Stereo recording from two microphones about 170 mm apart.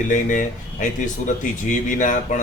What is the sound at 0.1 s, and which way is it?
Speech, 50° left (ahead or behind).